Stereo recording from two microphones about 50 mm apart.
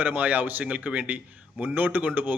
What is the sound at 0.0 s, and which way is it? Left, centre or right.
Speech, right.